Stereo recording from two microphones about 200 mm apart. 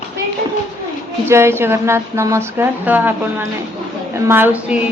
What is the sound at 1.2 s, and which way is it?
A woman's voice, 15° right (ahead or behind).